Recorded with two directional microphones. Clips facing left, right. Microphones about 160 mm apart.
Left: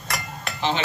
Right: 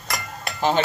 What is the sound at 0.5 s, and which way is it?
Dishes, 45° right (ahead or behind).